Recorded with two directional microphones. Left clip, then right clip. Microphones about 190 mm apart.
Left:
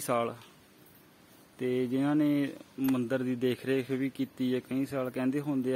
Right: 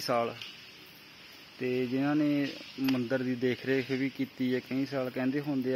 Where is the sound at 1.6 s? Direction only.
30° left (ahead or behind).